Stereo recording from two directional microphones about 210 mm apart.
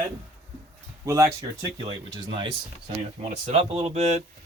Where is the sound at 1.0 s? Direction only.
15° right (ahead or behind).